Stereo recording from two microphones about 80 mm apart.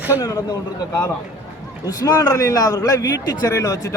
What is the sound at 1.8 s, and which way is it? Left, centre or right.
A man's voice, left.